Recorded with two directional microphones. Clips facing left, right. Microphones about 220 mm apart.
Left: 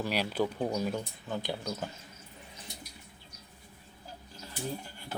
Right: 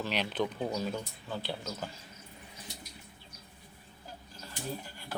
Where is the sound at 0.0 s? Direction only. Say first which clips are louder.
Left 2 dB; 10° left (ahead or behind).